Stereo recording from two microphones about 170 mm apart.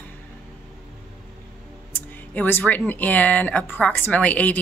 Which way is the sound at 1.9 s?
10° left (ahead or behind).